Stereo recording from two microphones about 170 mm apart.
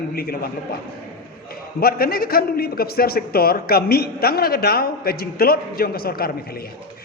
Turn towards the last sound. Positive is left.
turn(degrees=60)  # may be behind; listen again after turning